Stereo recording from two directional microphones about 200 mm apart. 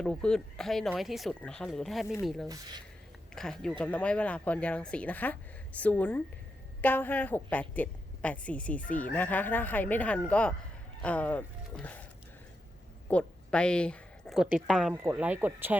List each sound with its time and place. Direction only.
0.0 s speech: 5° left (ahead or behind)
2.5 s speech: 20° right (ahead or behind)
3.3 s a woman's voice: 5° left (ahead or behind)
13.1 s a woman's voice: 5° left (ahead or behind); by 15.8 s 10° right (ahead or behind)